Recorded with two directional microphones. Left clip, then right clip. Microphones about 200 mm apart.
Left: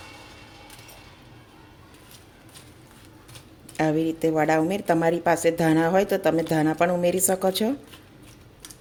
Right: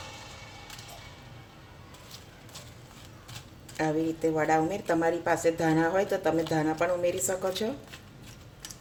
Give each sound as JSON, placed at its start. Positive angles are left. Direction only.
{"t": 3.8, "sound": "a woman's voice", "side_deg": 45}